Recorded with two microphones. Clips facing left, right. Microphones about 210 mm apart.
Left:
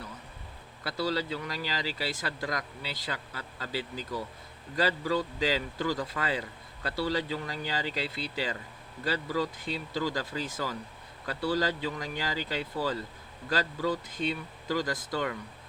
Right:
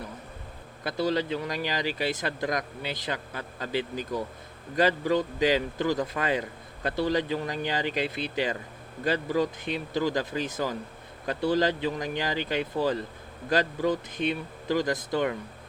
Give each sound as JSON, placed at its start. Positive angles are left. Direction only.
{"t": 0.9, "sound": "speech", "side_deg": -20}